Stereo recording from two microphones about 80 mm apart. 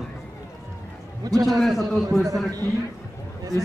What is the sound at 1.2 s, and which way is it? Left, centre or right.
Speech, right.